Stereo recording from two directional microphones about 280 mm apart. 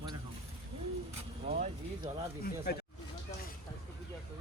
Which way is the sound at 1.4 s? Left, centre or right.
Right.